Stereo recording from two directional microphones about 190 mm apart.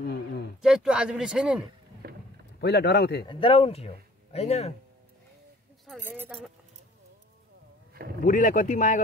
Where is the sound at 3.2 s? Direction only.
30° left (ahead or behind).